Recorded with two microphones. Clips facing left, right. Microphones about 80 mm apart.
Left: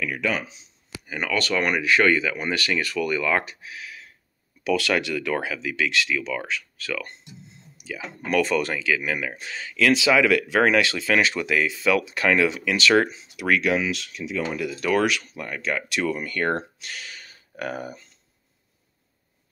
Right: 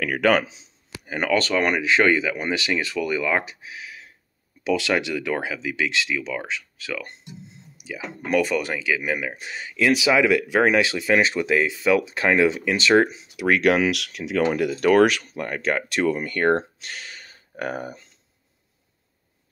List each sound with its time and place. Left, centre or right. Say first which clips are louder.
0.0 s speech: right 7 dB; right
1.0 s speech: right 4 dB; right
13.6 s speech: right 4 dB; right